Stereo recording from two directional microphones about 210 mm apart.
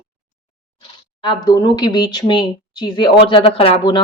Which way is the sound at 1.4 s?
20° left (ahead or behind).